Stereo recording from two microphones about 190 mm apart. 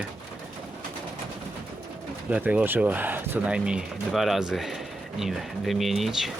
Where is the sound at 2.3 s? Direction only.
5° right (ahead or behind).